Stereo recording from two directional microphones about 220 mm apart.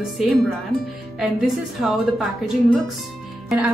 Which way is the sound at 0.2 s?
Centre (ahead or behind).